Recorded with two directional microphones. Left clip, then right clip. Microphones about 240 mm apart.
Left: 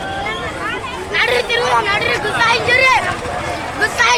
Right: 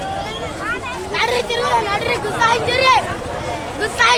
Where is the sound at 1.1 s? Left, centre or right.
Right.